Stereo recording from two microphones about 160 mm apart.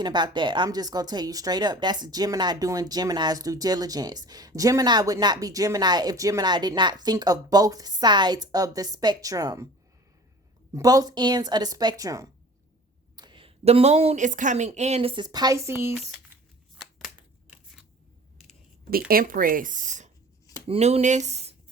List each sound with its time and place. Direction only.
0.0 s speech: 30° right (ahead or behind)
10.8 s a woman's voice: 25° right (ahead or behind)
16.7 s scissors: 5° right (ahead or behind)
18.9 s speech: 70° right (ahead or behind); by 20.1 s 50° right (ahead or behind)
20.7 s speech: 40° right (ahead or behind)